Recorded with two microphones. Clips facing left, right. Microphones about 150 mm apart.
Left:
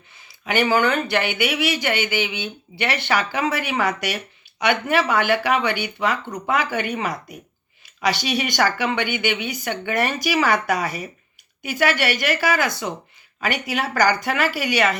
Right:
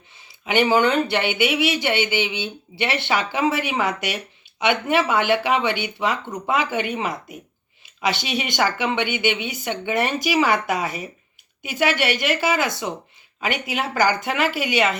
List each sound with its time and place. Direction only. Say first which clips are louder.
0.4 s speech: right 1 dB; 20° right (ahead or behind)